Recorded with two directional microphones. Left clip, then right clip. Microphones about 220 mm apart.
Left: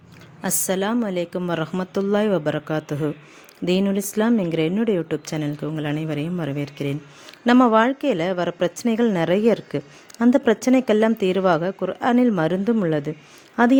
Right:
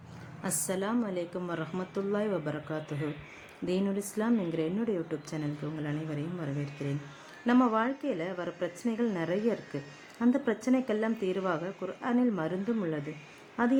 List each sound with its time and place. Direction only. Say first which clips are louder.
0.4 s a woman's voice: left 10 dB; 40° left (ahead or behind)